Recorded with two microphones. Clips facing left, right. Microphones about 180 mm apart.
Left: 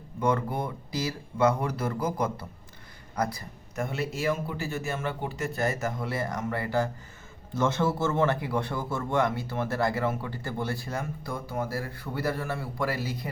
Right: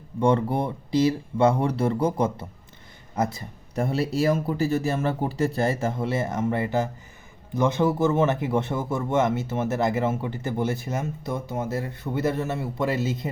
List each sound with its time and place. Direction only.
0.2 s speech: 30° right (ahead or behind)